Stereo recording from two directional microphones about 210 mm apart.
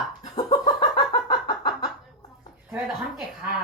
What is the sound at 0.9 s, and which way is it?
Chicken, 20° left (ahead or behind).